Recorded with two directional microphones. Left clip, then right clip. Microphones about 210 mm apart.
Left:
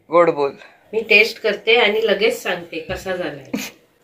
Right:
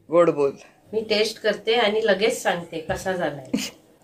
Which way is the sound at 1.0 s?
65° right (ahead or behind).